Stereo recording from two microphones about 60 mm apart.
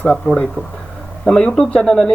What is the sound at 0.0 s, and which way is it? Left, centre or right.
A man's voice, centre.